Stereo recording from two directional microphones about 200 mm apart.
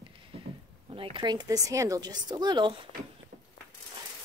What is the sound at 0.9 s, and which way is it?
Speech, 25° right (ahead or behind).